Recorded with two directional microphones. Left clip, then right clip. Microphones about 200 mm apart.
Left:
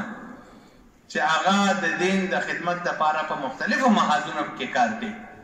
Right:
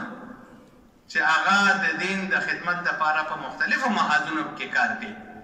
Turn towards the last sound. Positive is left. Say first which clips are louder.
# left 1 dB
turn(degrees=25)  # may be behind; listen again after turning